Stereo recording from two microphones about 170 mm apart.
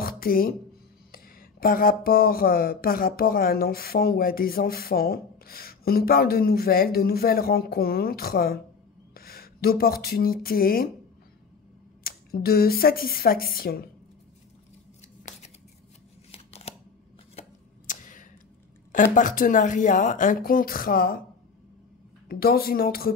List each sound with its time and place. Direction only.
0.2 s speech: 60° left (ahead or behind)
12.0 s speech: 60° left (ahead or behind)
16.3 s scissors: 35° left (ahead or behind)
17.4 s a sound: 50° left (ahead or behind)
19.1 s speech: 50° left (ahead or behind)
22.3 s speech: 60° left (ahead or behind)